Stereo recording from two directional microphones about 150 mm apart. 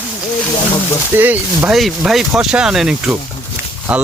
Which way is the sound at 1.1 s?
15° right (ahead or behind).